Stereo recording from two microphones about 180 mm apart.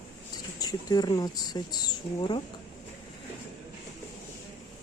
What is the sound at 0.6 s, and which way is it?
Speech, 20° left (ahead or behind).